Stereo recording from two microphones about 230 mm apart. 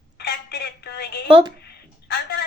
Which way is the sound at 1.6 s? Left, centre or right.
Left.